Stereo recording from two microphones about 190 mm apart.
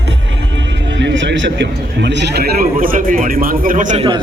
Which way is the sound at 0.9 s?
70° right (ahead or behind).